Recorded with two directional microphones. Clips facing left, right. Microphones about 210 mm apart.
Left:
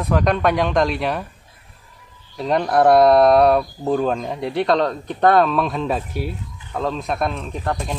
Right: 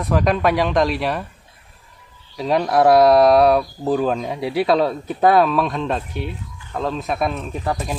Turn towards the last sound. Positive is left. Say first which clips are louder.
# right 1 dB
turn(degrees=-5)  # may be behind; listen again after turning